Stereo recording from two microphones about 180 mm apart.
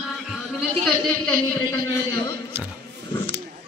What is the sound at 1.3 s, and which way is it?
Speech, 25° left (ahead or behind).